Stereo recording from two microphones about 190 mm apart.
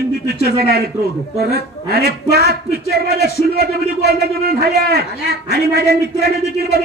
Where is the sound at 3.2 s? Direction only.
55° left (ahead or behind).